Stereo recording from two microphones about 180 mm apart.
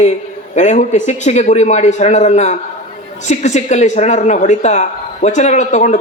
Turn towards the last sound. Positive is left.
turn(degrees=40)  # may be behind; listen again after turning